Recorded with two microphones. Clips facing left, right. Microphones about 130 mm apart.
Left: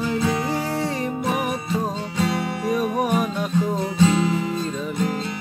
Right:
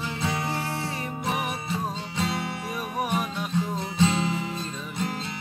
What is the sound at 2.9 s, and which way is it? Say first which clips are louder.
Music: left 6 dB; 50° left (ahead or behind).